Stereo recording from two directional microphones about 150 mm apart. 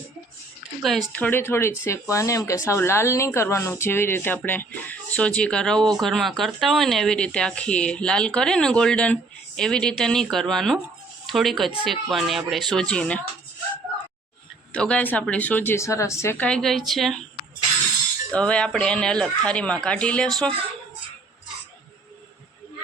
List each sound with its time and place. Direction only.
0.8 s a woman's voice: centre (ahead or behind)
14.7 s speech: 5° left (ahead or behind)
18.3 s speech: 5° left (ahead or behind)